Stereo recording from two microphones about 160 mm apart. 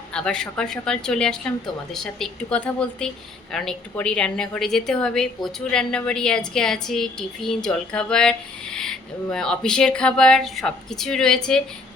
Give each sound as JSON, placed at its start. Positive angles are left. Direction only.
{"t": 0.1, "sound": "a woman's voice", "side_deg": 5}